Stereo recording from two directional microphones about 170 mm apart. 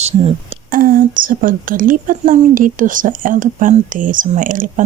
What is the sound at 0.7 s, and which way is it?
Speech, 55° right (ahead or behind).